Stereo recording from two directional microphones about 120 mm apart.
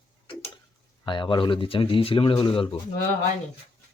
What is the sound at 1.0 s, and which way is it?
Speech, 40° left (ahead or behind).